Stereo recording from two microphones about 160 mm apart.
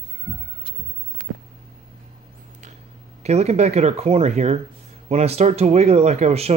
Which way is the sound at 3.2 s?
45° right (ahead or behind).